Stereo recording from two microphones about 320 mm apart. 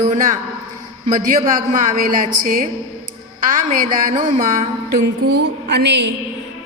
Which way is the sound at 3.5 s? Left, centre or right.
Right.